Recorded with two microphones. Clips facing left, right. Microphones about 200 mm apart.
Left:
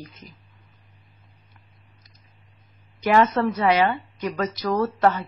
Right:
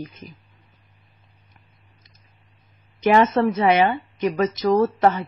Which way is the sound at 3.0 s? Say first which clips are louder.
Right 2 dB; 20° right (ahead or behind).